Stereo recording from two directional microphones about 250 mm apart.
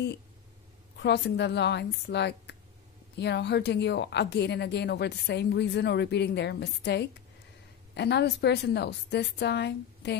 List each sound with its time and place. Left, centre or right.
0.9 s a woman's voice: left